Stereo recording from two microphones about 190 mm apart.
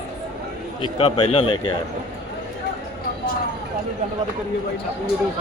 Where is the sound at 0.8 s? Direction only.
30° left (ahead or behind).